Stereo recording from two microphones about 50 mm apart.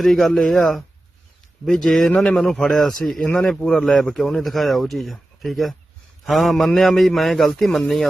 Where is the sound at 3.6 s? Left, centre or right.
Centre.